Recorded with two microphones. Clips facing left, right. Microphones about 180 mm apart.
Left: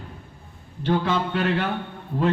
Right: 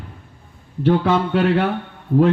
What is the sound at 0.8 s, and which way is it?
Speech, 60° right (ahead or behind).